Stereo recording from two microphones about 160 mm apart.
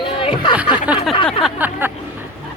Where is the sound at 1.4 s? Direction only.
10° right (ahead or behind).